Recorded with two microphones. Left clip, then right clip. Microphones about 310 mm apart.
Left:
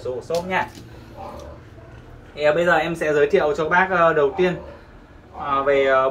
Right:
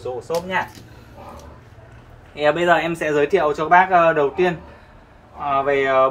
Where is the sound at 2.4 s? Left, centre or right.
Right.